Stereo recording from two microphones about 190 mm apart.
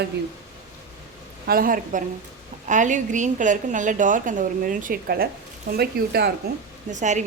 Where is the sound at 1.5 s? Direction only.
50° right (ahead or behind).